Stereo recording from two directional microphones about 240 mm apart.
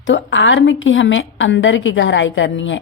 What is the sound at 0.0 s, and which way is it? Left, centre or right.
A woman's voice, left.